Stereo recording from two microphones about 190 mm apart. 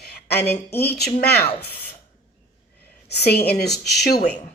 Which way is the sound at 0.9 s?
60° left (ahead or behind).